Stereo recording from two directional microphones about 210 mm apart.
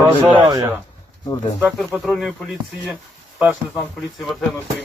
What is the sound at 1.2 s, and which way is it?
Speech, 20° left (ahead or behind).